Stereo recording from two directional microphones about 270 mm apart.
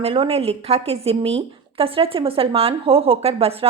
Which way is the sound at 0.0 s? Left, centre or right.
Right.